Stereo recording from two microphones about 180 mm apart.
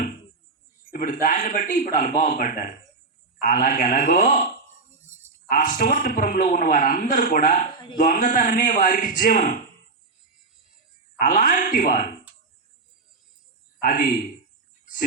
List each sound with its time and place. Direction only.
0.9 s a man's voice: 45° left (ahead or behind)
5.5 s a man's voice: 50° left (ahead or behind)
11.2 s a man's voice: 45° left (ahead or behind)
13.8 s a man's voice: 50° left (ahead or behind)